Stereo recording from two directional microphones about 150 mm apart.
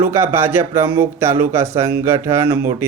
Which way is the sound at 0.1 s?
15° right (ahead or behind).